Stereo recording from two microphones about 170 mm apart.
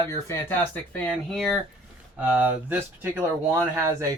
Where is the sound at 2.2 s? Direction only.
10° right (ahead or behind).